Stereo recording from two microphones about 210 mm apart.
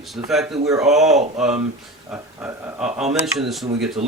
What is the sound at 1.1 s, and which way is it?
Speech, 30° right (ahead or behind).